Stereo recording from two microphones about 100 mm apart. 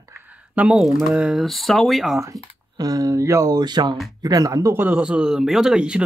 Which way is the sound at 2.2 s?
35° right (ahead or behind).